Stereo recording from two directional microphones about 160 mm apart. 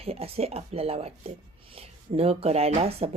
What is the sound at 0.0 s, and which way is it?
Speech, 40° right (ahead or behind).